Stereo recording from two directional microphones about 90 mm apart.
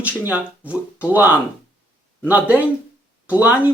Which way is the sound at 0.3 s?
15° right (ahead or behind).